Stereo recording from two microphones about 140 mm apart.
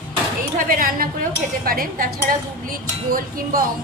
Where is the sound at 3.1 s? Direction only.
90° right.